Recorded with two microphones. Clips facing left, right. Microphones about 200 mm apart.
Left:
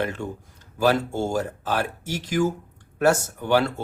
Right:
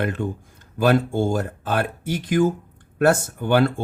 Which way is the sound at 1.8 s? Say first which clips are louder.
Right 3 dB; 55° right (ahead or behind).